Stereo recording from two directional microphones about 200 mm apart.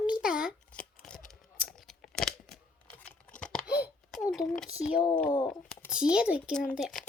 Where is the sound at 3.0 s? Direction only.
5° left (ahead or behind).